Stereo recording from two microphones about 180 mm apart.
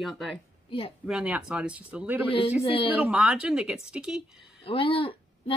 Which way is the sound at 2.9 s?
5° right (ahead or behind).